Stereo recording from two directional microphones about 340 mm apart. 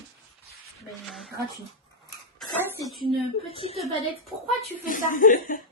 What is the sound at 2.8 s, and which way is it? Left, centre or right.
Speech, centre.